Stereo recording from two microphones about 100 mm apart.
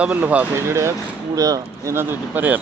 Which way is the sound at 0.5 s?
25° right (ahead or behind).